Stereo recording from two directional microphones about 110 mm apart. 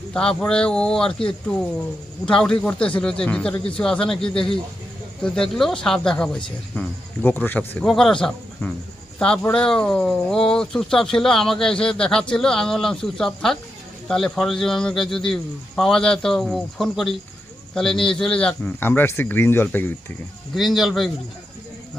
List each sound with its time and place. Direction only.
0.1 s speech: 10° left (ahead or behind)
2.2 s speech: 5° left (ahead or behind)
7.9 s speech: 5° left (ahead or behind)
20.6 s speech: centre (ahead or behind)